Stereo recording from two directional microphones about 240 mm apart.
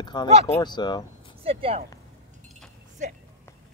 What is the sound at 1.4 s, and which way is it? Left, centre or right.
Speech, right.